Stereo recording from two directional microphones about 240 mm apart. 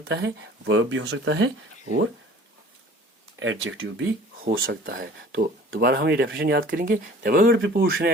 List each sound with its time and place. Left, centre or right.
0.0 s speech: right
3.4 s speech: right
4.4 s speech: right